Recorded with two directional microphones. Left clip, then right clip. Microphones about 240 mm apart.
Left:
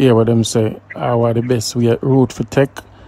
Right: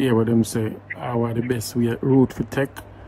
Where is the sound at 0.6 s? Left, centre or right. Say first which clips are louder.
Left 9 dB; left.